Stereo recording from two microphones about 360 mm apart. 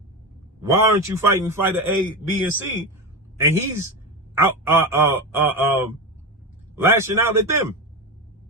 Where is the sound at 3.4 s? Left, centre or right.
Centre.